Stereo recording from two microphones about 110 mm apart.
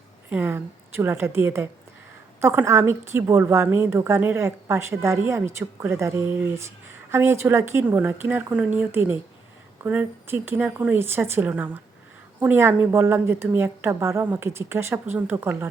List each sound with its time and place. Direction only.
0.3 s a woman's voice: 20° right (ahead or behind)